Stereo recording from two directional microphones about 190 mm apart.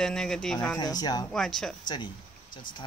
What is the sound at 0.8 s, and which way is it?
Speech, 20° left (ahead or behind).